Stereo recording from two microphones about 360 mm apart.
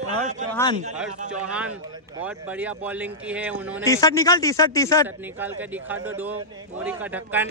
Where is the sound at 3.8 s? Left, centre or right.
Centre.